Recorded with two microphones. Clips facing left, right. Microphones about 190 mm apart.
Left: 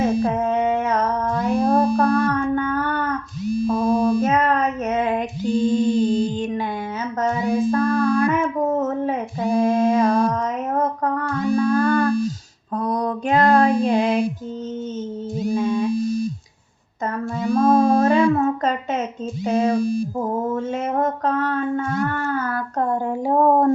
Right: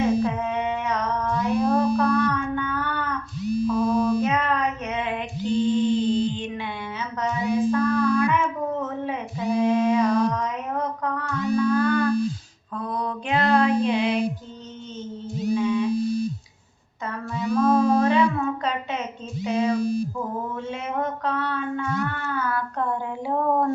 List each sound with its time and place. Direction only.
0.0 s a sound: 45° left (ahead or behind)
3.7 s female singing: 45° left (ahead or behind)
5.5 s a sound: 45° left (ahead or behind)
8.3 s female singing: 45° left (ahead or behind)
11.5 s music: 45° left (ahead or behind)
12.7 s female singing: 40° left (ahead or behind)
15.5 s music: 45° left (ahead or behind)
17.0 s a sound: 45° left (ahead or behind)
19.5 s mantra: 45° left (ahead or behind)